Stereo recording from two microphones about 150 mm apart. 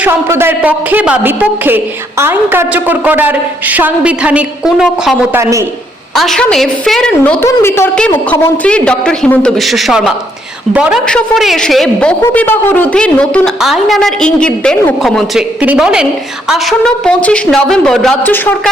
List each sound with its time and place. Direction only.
0.0 s a woman's voice: 15° right (ahead or behind)
5.3 s a woman's voice: 20° right (ahead or behind)
6.1 s a woman's voice: centre (ahead or behind)
7.4 s a woman's voice: 15° left (ahead or behind)